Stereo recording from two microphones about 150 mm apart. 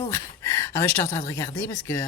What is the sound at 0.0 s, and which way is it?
A woman's voice, 20° left (ahead or behind).